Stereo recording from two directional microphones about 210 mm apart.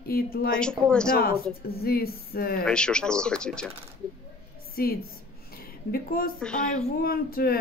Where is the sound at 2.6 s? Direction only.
5° left (ahead or behind).